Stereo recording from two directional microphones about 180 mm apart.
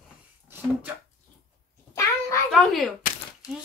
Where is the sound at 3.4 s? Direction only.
20° left (ahead or behind).